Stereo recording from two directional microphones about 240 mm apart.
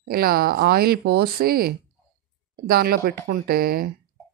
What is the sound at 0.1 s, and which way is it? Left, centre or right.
Speech, right.